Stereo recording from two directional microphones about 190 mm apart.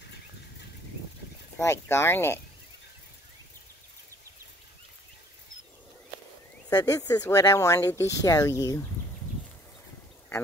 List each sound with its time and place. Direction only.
1.6 s speech: 15° left (ahead or behind)
6.7 s speech: 20° left (ahead or behind)